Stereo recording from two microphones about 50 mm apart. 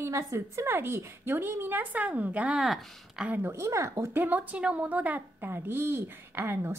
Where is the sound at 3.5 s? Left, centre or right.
Right.